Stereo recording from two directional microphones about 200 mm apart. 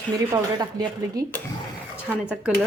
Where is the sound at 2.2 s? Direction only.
5° right (ahead or behind).